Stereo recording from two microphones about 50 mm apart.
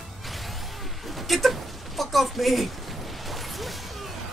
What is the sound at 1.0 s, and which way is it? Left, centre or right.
Speech, centre.